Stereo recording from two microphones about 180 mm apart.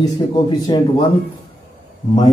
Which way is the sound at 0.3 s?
25° left (ahead or behind).